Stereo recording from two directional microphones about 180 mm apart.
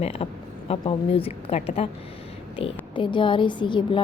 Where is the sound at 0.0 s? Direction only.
35° left (ahead or behind).